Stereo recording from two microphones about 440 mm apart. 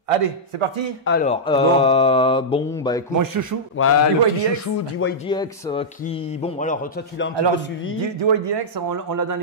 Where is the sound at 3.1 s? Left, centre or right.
Right.